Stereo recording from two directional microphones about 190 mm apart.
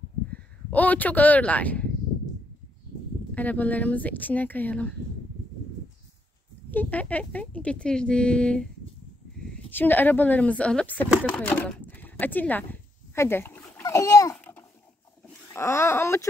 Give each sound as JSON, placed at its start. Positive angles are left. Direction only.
{"t": 0.3, "sound": "speech", "side_deg": 10}
{"t": 3.3, "sound": "speech", "side_deg": 10}
{"t": 6.7, "sound": "speech", "side_deg": 10}
{"t": 9.7, "sound": "speech", "side_deg": 10}
{"t": 13.1, "sound": "a sound", "side_deg": 15}
{"t": 15.5, "sound": "speech", "side_deg": 15}